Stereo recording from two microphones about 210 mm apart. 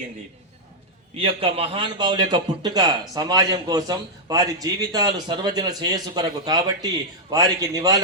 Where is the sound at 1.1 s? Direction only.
25° right (ahead or behind).